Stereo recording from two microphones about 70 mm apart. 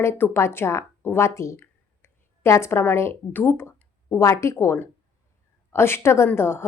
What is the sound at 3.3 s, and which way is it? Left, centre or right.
Speech, left.